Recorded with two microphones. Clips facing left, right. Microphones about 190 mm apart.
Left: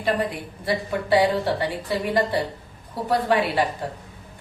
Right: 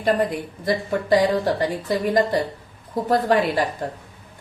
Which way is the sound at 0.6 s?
45° right (ahead or behind).